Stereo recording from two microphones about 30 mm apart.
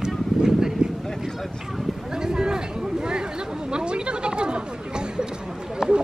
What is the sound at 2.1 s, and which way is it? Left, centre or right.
Chatter, right.